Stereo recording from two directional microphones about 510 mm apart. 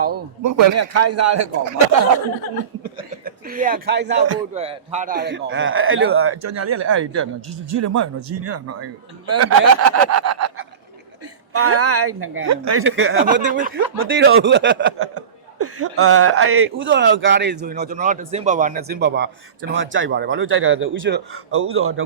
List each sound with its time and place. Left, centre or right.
0.4 s a man's voice: right
3.1 s a woman's voice: centre